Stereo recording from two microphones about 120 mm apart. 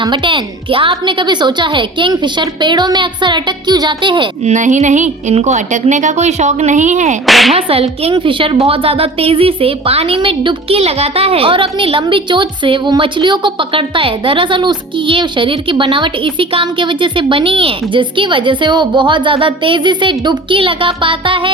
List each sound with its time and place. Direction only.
0.0 s a woman's voice: 40° right (ahead or behind)
4.4 s a woman's voice: 90° right
7.3 s music: centre (ahead or behind)
7.5 s speech: 55° right (ahead or behind)
8.1 s a woman's voice: 45° right (ahead or behind)
10.2 s a woman's voice: 40° right (ahead or behind)
10.8 s a woman's voice: 60° right (ahead or behind)